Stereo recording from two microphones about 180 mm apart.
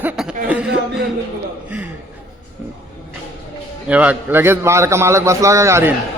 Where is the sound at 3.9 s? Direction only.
10° right (ahead or behind).